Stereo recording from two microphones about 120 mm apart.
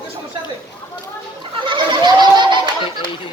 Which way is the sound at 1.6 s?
40° right (ahead or behind).